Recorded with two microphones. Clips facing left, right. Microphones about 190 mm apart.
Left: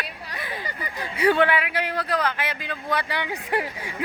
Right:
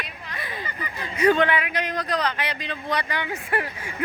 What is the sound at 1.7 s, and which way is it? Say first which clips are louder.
Speech: left 1 dB; 5° left (ahead or behind).